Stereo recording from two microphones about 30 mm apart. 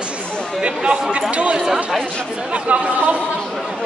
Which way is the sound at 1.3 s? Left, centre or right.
Right.